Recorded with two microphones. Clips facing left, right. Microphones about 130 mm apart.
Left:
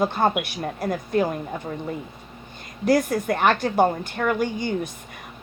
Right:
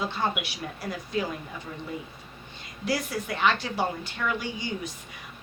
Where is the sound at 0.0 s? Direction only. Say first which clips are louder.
Left 8 dB; 50° left (ahead or behind).